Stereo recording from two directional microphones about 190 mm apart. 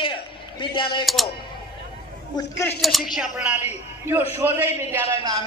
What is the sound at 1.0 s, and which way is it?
Speech, centre (ahead or behind).